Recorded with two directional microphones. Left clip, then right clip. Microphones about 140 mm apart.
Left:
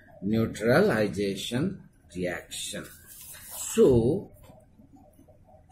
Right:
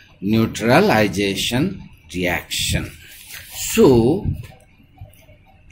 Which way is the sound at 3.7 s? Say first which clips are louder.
Right 7 dB; 20° right (ahead or behind).